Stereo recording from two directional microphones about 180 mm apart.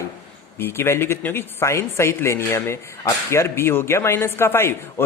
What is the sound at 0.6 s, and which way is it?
Speech, 15° left (ahead or behind).